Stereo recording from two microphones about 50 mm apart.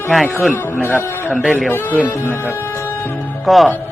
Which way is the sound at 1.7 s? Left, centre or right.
Left.